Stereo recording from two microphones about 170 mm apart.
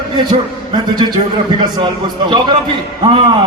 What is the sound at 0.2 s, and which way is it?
A man's voice, 25° right (ahead or behind).